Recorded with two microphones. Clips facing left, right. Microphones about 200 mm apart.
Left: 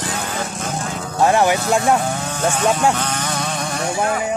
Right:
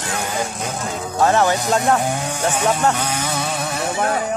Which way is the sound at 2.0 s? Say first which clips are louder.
Even; 15° right (ahead or behind).